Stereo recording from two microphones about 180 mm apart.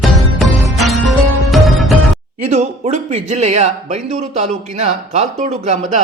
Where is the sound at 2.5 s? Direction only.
40° right (ahead or behind).